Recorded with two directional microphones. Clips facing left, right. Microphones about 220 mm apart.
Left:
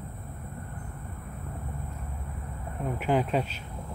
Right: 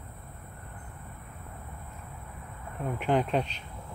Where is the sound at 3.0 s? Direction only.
5° left (ahead or behind).